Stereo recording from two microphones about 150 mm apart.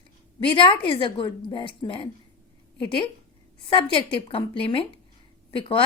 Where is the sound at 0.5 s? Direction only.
35° left (ahead or behind).